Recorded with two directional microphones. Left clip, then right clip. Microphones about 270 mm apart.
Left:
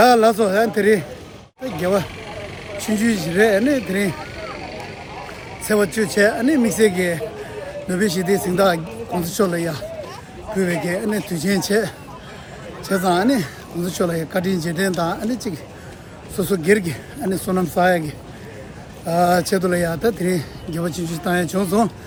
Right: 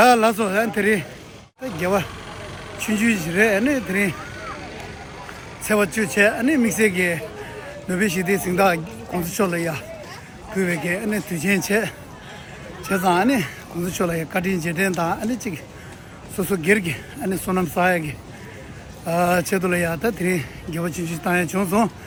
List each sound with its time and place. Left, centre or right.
0.0 s speech: centre
2.7 s speech: left
3.0 s speech: centre
5.6 s speech: centre
19.0 s speech: centre